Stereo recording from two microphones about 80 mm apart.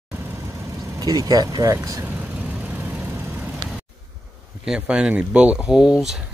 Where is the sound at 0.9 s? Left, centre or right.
Right.